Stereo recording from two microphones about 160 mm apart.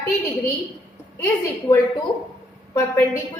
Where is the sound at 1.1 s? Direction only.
15° left (ahead or behind).